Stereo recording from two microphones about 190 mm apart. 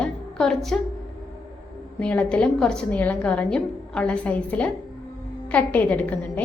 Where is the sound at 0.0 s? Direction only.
5° left (ahead or behind).